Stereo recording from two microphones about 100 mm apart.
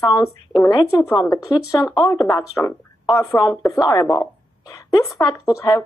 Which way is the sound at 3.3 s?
35° left (ahead or behind).